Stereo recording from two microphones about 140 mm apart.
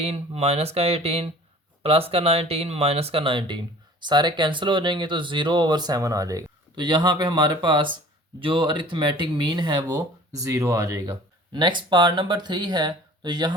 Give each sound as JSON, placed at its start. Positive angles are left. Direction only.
{"t": 0.0, "sound": "speech", "side_deg": -45}